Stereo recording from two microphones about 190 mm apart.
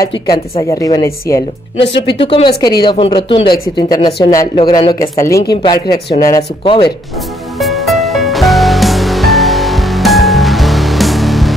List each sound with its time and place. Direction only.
0.1 s speech: 20° left (ahead or behind)
2.1 s speech: 30° left (ahead or behind)
7.5 s music: centre (ahead or behind)